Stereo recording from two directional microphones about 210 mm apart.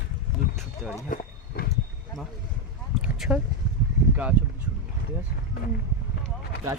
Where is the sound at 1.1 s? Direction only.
40° left (ahead or behind).